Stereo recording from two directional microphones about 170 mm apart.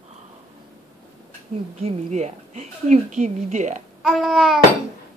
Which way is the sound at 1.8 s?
40° right (ahead or behind).